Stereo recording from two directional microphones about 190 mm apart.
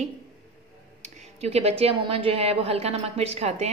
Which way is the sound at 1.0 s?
35° right (ahead or behind).